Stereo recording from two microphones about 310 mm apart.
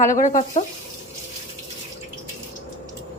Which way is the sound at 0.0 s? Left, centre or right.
Left.